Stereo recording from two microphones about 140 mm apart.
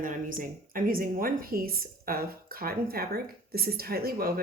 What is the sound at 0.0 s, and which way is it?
A woman's voice, 75° right (ahead or behind).